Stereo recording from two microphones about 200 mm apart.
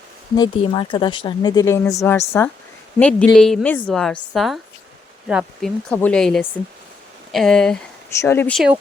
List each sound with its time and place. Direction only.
0.3 s speech: 25° left (ahead or behind)